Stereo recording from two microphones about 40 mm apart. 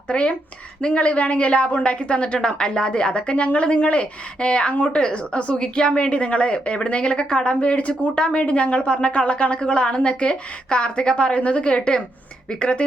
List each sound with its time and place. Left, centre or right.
0.1 s a woman's voice: left